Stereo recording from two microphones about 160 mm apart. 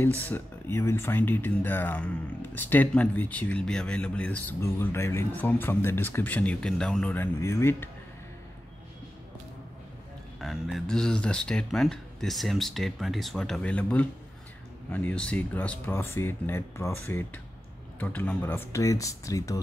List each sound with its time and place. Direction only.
0.0 s speech: 10° left (ahead or behind)
10.4 s speech: centre (ahead or behind); by 19.6 s 20° left (ahead or behind)